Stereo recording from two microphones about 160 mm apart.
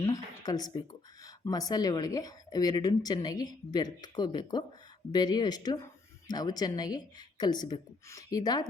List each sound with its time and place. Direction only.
0.0 s speech: 25° left (ahead or behind)